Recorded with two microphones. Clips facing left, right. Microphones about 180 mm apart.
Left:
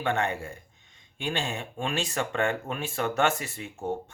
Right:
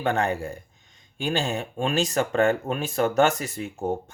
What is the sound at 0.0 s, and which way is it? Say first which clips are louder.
Speech: right 4 dB; 40° right (ahead or behind).